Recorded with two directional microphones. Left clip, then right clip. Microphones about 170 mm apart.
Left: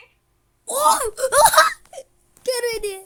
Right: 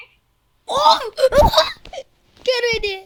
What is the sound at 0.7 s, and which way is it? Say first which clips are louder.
Wail: right 4 dB; 10° left (ahead or behind).